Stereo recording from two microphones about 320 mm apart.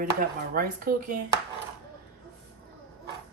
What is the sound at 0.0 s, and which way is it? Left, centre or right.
Speech, right.